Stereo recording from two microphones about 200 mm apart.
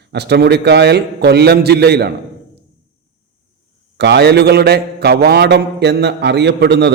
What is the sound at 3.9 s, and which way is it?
A man's voice, 55° right (ahead or behind).